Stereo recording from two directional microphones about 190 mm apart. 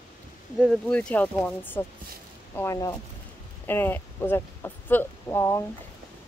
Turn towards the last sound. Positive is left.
turn(degrees=15)  # may be behind; listen again after turning